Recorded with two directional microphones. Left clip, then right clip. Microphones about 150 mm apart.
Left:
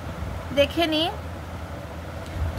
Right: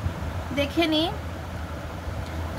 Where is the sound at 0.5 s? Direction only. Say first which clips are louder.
Left 3 dB; 35° left (ahead or behind).